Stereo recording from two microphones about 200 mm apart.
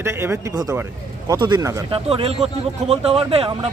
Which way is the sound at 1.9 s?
30° right (ahead or behind).